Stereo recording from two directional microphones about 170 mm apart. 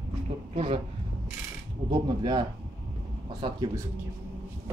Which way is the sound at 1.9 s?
25° right (ahead or behind).